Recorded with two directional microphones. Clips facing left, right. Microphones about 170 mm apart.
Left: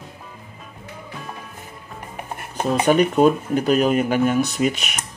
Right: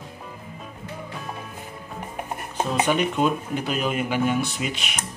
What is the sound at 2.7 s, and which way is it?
Speech, 45° left (ahead or behind).